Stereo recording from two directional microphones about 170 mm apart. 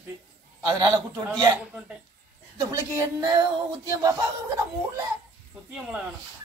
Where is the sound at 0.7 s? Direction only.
20° right (ahead or behind).